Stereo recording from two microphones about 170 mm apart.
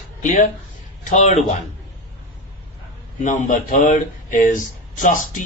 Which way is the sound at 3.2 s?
45° left (ahead or behind).